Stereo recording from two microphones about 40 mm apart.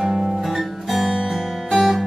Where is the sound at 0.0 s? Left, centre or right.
Centre.